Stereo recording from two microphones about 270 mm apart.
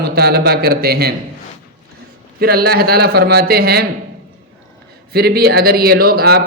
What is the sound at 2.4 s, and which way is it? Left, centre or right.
A man's voice, right.